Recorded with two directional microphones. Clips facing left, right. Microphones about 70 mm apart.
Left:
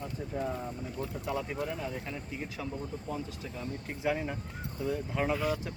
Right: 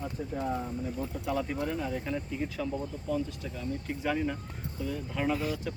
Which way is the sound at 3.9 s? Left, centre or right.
Centre.